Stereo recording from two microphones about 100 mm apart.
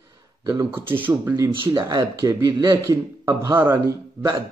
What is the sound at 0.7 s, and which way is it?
Speech, 20° right (ahead or behind).